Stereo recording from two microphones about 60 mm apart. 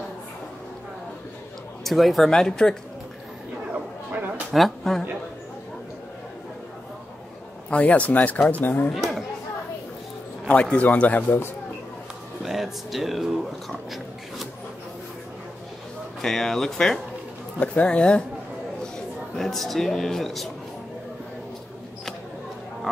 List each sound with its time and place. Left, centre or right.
1.9 s speech: centre
4.5 s speech: centre
7.7 s speech: left
8.9 s a sound: centre
10.5 s speech: left
12.4 s speech: centre
16.2 s speech: centre
17.6 s speech: left
18.9 s speech: centre